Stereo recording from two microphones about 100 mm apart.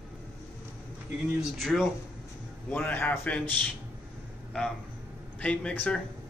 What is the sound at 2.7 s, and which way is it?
Speech, 20° left (ahead or behind).